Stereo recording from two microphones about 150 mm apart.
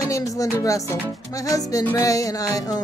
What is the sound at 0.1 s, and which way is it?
Speech, 20° left (ahead or behind).